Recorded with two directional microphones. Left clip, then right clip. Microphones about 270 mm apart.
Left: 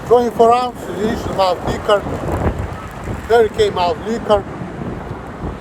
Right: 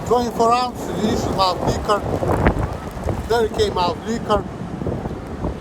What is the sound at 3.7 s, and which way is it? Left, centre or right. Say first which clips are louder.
Speech: left 3 dB; right.